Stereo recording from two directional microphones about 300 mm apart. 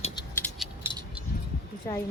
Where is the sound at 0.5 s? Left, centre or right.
Centre.